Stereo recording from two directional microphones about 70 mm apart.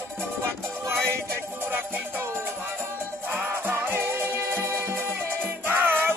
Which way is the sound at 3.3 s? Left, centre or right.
Right.